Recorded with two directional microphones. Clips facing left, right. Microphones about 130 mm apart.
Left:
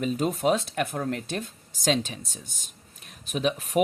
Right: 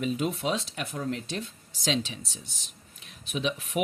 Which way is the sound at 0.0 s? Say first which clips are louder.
Left 4 dB; 40° left (ahead or behind).